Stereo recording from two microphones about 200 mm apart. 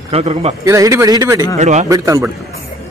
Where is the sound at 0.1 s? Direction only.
30° right (ahead or behind).